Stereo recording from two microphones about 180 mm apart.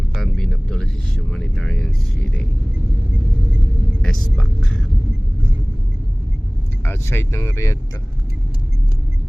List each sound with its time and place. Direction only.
0.1 s a sound: centre (ahead or behind)
4.0 s music: 5° left (ahead or behind)
6.8 s speech: 15° left (ahead or behind)